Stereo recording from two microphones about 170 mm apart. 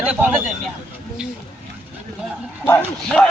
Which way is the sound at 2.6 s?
10° left (ahead or behind).